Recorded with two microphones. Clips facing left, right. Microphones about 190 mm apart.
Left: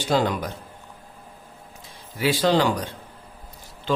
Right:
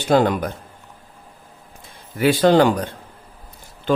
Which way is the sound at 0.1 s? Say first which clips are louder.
Right 6 dB; 55° right (ahead or behind).